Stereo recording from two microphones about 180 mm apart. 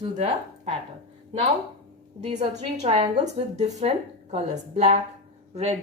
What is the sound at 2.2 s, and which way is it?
A woman's voice, 40° right (ahead or behind).